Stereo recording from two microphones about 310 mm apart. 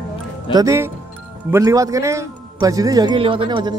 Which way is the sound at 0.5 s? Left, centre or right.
Centre.